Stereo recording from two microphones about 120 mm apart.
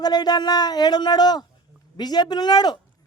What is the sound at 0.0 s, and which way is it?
Speech, 35° left (ahead or behind).